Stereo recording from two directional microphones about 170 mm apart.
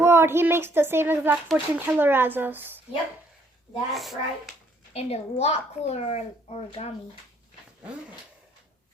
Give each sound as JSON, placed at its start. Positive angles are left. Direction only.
{"t": 0.0, "sound": "a child's voice", "side_deg": -15}
{"t": 3.9, "sound": "speech", "side_deg": 0}
{"t": 4.9, "sound": "a woman's voice", "side_deg": 40}